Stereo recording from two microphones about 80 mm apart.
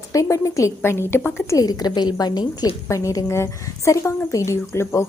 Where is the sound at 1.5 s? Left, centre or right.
Left.